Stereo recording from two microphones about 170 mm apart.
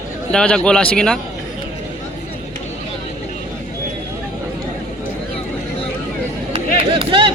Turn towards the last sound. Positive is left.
turn(degrees=-30)  # may be behind; listen again after turning